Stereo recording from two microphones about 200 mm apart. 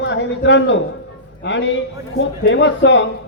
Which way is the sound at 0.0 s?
65° left (ahead or behind).